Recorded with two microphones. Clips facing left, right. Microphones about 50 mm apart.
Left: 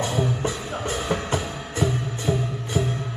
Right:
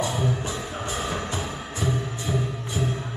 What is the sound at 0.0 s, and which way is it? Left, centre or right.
Music, left.